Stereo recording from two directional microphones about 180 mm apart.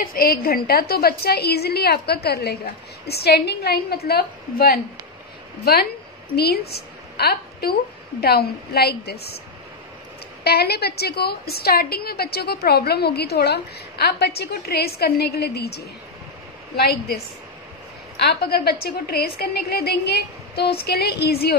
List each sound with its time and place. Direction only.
0.0 s a woman's voice: 55° left (ahead or behind)
10.4 s a woman's voice: 60° left (ahead or behind)
18.1 s a woman's voice: 60° left (ahead or behind)